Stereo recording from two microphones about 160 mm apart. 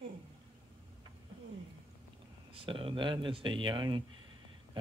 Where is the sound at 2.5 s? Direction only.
35° right (ahead or behind).